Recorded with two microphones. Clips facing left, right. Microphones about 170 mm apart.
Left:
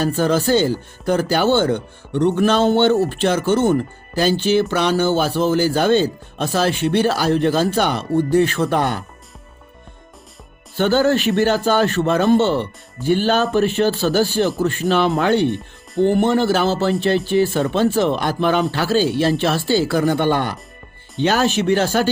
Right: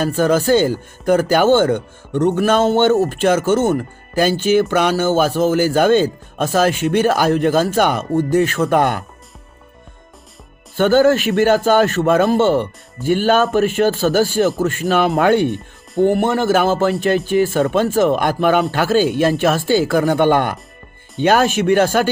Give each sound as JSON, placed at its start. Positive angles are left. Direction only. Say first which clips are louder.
{"t": 0.0, "sound": "speech", "louder": "right 2 dB", "side_deg": -50}
{"t": 10.8, "sound": "speech", "louder": "right 4 dB", "side_deg": -50}